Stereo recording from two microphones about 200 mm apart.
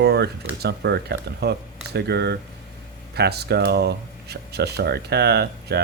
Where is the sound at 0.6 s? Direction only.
55° right (ahead or behind).